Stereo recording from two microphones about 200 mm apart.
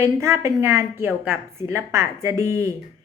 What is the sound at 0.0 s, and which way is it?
A woman's voice, 15° right (ahead or behind).